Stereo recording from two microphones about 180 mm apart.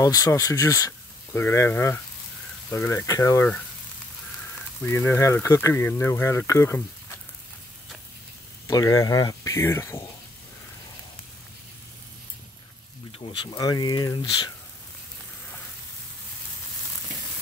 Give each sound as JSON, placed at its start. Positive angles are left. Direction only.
{"t": 0.0, "sound": "speech", "side_deg": 20}
{"t": 4.8, "sound": "speech", "side_deg": 15}
{"t": 8.6, "sound": "speech", "side_deg": 20}
{"t": 13.2, "sound": "speech", "side_deg": 25}